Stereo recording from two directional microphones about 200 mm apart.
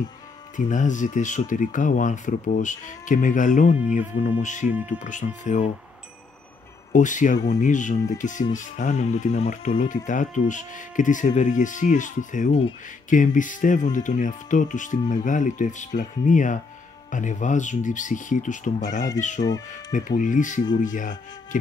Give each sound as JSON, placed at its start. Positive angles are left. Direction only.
{"t": 0.6, "sound": "speech", "side_deg": 40}
{"t": 6.9, "sound": "speech", "side_deg": 40}